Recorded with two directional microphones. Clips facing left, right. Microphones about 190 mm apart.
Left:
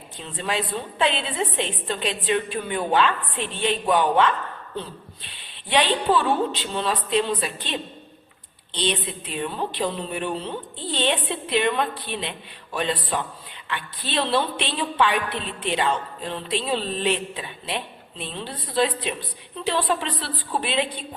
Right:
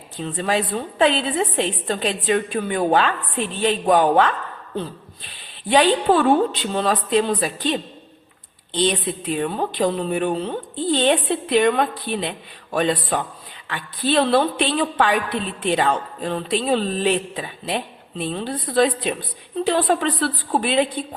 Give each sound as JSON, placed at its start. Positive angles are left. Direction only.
{"t": 0.2, "sound": "a woman's voice", "side_deg": -40}
{"t": 5.6, "sound": "a woman's voice", "side_deg": -45}